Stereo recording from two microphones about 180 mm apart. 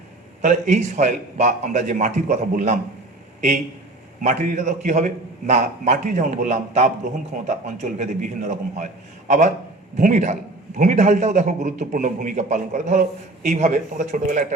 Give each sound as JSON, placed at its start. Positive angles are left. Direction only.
{"t": 0.4, "sound": "a man's voice", "side_deg": -40}
{"t": 4.2, "sound": "a man's voice", "side_deg": -40}